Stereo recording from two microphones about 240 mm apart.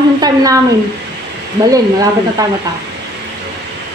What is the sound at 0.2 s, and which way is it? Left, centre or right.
Speech, centre.